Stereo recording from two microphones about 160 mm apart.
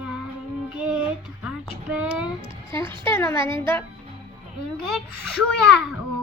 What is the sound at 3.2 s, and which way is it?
Speech, 15° left (ahead or behind).